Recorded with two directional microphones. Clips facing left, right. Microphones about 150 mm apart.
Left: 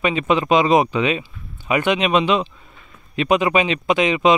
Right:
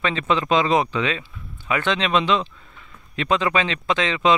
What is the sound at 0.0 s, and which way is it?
Speech, 15° left (ahead or behind).